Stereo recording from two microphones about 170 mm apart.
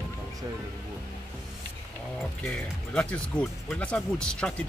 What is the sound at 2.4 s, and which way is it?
Speech, 5° left (ahead or behind).